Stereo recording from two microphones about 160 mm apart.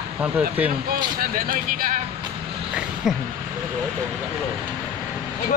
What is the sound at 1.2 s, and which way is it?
Speech, 60° right (ahead or behind).